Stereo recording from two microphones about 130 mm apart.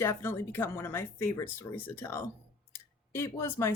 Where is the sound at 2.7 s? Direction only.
20° left (ahead or behind).